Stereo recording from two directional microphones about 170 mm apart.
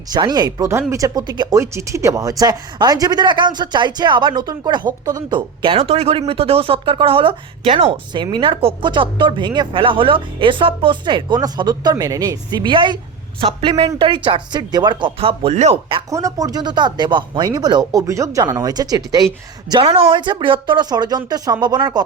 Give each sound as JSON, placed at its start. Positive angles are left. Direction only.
{"t": 0.1, "sound": "speech", "side_deg": -25}
{"t": 16.0, "sound": "speech", "side_deg": -20}
{"t": 19.7, "sound": "speech", "side_deg": -35}